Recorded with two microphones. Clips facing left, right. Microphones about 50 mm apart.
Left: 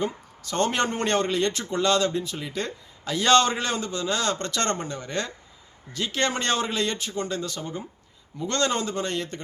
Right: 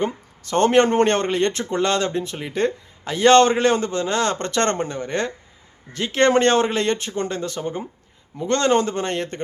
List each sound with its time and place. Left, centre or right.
0.0 s speech: right